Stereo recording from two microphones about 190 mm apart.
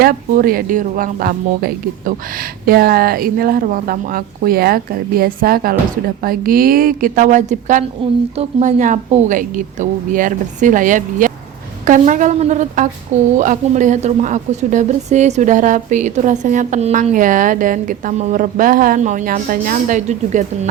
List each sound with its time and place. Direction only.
0.0 s speech: 50° right (ahead or behind)